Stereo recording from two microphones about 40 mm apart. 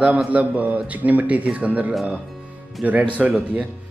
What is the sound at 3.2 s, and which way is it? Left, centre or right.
Speech, centre.